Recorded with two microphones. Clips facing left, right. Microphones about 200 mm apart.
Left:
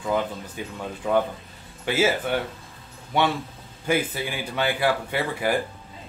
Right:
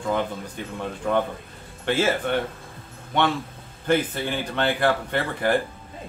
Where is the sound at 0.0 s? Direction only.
5° left (ahead or behind).